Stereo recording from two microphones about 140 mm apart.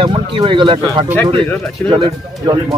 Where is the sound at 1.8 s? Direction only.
15° left (ahead or behind).